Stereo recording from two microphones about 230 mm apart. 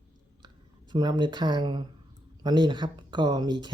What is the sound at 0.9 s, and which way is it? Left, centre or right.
Speech, centre.